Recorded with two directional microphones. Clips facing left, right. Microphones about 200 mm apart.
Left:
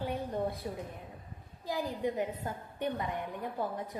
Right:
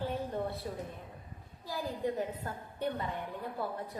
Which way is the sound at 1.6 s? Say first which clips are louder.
Left 2 dB; 20° left (ahead or behind).